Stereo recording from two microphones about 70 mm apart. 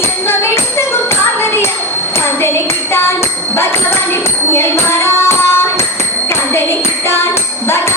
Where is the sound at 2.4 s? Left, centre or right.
Left.